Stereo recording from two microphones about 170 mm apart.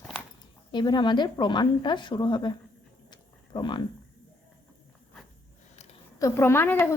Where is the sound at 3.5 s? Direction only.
25° left (ahead or behind).